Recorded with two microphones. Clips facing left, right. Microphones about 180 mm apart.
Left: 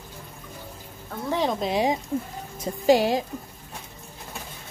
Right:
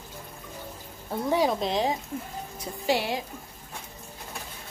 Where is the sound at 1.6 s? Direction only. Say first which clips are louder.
Left 2 dB; 5° left (ahead or behind).